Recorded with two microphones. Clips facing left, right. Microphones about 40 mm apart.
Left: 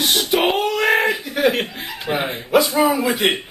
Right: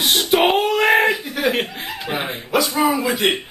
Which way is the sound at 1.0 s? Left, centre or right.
Centre.